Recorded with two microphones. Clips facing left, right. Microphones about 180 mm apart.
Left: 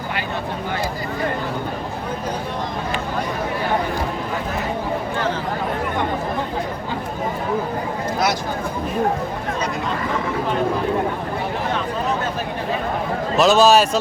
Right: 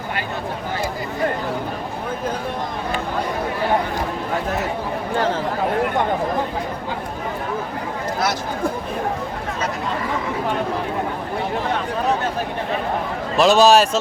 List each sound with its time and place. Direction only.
13.3 s a man's voice: centre (ahead or behind)